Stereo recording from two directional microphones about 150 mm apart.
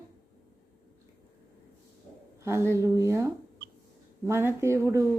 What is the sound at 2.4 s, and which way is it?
A woman's voice, 20° right (ahead or behind).